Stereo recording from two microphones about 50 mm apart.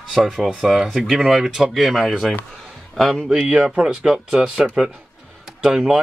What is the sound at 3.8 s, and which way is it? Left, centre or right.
Speech, centre.